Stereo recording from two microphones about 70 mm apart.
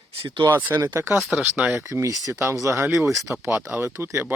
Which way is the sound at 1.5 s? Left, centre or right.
Centre.